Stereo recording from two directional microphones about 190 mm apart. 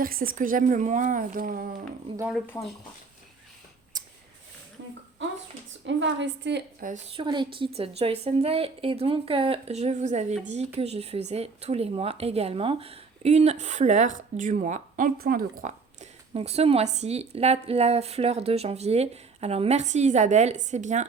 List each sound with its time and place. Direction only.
0.0 s speech: 50° right (ahead or behind)
2.3 s speech: centre (ahead or behind)
3.9 s a sound: 20° right (ahead or behind)
5.8 s a woman's voice: 70° right (ahead or behind)
6.8 s speech: 40° right (ahead or behind)
7.2 s speech: 25° right (ahead or behind)